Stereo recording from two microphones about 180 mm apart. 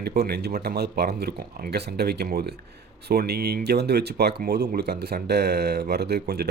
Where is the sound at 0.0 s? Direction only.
60° right (ahead or behind).